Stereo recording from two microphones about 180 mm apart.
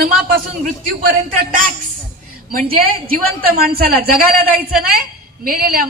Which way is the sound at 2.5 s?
55° right (ahead or behind).